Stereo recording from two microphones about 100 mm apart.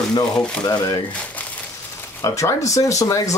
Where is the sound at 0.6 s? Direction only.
35° left (ahead or behind).